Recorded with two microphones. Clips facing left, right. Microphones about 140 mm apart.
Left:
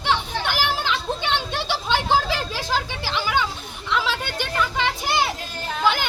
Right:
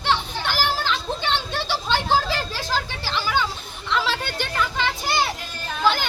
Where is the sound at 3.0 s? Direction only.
15° left (ahead or behind).